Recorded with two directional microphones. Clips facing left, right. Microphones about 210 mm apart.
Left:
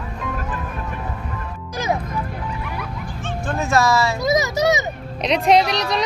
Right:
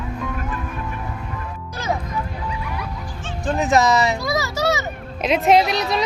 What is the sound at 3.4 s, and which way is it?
Speech, 15° right (ahead or behind).